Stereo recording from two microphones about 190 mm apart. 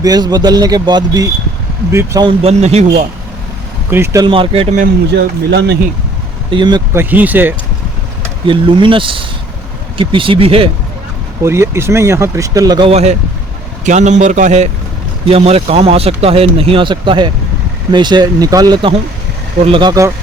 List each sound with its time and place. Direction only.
0.0 s speech: 20° right (ahead or behind)
2.2 s speech: 35° right (ahead or behind)
3.8 s speech: 10° right (ahead or behind); by 4.7 s 30° right (ahead or behind)
5.1 s speech: 65° right (ahead or behind)
6.5 s speech: 25° right (ahead or behind)
6.9 s speech: 10° right (ahead or behind)
8.4 s speech: 25° right (ahead or behind)
11.4 s speech: 15° right (ahead or behind)
12.9 s speech: 35° right (ahead or behind); by 20.1 s 15° right (ahead or behind)